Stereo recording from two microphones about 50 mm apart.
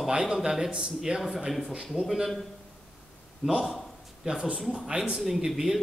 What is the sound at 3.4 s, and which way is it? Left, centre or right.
Speech, centre.